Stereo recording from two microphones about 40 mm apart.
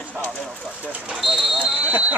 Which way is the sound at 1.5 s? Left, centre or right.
Right.